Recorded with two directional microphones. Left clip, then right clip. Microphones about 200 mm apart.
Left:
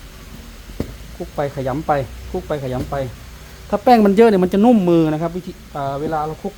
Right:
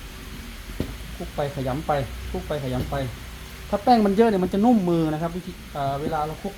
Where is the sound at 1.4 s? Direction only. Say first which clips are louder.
Left 5 dB; 45° left (ahead or behind).